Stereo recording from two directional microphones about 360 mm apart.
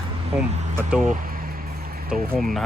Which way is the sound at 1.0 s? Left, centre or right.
Right.